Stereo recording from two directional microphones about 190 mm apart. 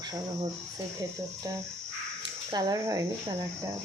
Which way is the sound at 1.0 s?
15° right (ahead or behind).